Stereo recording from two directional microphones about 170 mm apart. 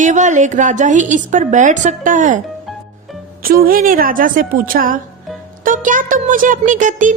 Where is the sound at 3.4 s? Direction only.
60° right (ahead or behind).